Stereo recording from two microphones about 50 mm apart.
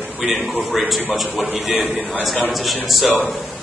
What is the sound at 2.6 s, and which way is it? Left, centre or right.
Speech, centre.